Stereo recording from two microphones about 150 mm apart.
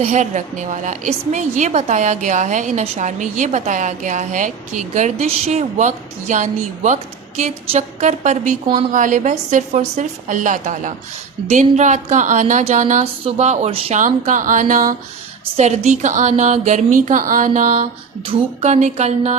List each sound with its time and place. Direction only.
0.0 s a woman's voice: 50° right (ahead or behind)
14.0 s a woman's voice: 60° right (ahead or behind)
15.5 s a woman's voice: 50° right (ahead or behind)